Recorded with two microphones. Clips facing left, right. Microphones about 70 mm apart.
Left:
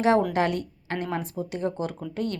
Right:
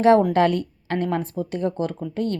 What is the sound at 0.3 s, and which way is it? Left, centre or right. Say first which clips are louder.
Speech: right 6 dB; centre.